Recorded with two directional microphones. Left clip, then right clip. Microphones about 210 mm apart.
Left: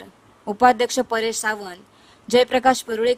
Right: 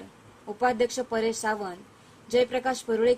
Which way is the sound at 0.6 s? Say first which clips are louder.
Left 9 dB; 55° left (ahead or behind).